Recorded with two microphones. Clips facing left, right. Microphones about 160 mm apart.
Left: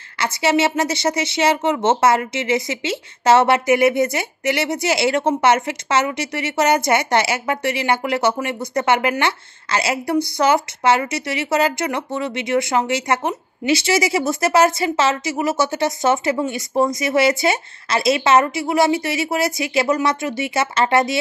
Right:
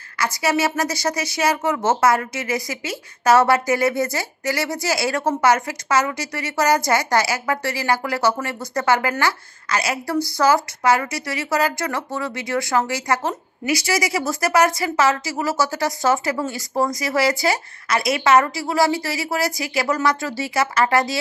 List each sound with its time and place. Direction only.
0.2 s speech: 25° left (ahead or behind)